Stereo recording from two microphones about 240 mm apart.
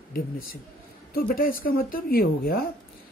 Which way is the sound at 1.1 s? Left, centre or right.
Left.